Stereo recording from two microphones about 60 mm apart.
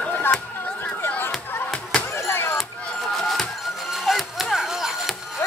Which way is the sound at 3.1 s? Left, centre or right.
Centre.